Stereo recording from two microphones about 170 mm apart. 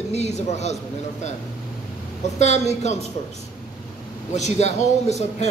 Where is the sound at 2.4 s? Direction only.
40° left (ahead or behind).